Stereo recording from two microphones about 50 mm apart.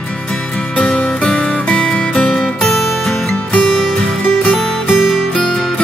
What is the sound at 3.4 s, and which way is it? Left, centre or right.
Music, left.